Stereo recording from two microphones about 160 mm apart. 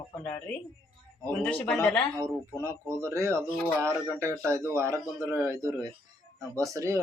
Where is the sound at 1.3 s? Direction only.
5° left (ahead or behind).